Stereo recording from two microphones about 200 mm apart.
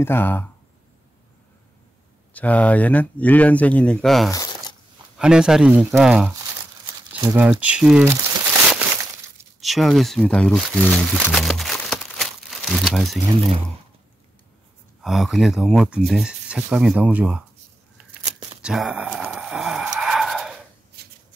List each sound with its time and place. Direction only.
0.0 s speech: 10° left (ahead or behind)
2.3 s speech: 5° left (ahead or behind)
4.3 s a sound: 20° left (ahead or behind)
5.1 s speech: 5° right (ahead or behind)
9.6 s speech: centre (ahead or behind)
15.0 s speech: centre (ahead or behind)
18.6 s a sound: 5° right (ahead or behind)
21.0 s shuffling cards: 55° right (ahead or behind)